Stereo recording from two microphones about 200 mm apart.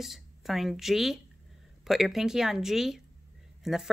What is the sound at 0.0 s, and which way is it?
Speech, centre (ahead or behind).